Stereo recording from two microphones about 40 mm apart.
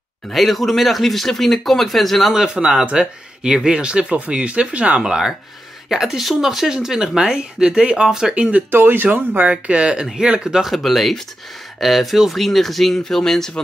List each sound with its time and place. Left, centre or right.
0.3 s speech: centre
2.5 s speech: centre
8.4 s speech: right
8.6 s speech: right
9.7 s speech: right
10.4 s speech: centre
10.7 s speech: centre